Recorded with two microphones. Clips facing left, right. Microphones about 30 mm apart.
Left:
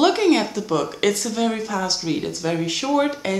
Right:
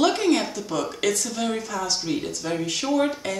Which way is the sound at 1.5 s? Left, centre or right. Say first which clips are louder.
Left 3 dB; left.